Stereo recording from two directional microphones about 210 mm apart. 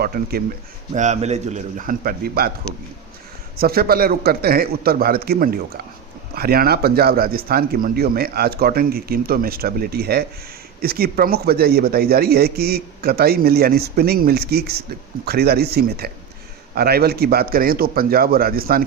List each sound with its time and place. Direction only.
0.0 s speech: 45° right (ahead or behind)
0.9 s speech: 35° right (ahead or behind)
3.6 s speech: 45° right (ahead or behind)